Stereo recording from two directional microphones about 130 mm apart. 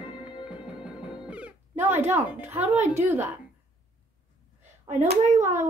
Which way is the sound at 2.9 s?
20° right (ahead or behind).